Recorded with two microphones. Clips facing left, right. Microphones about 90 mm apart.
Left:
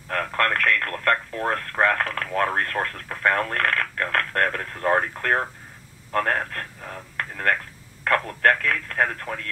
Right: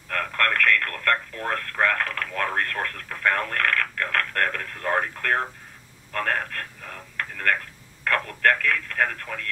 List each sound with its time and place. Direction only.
0.1 s speech: 25° left (ahead or behind)